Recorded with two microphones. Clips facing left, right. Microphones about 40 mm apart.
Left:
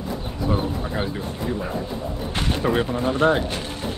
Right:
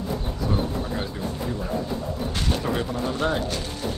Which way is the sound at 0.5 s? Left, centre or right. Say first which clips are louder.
Left 2 dB; left.